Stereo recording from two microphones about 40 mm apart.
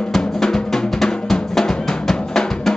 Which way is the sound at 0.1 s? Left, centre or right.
Centre.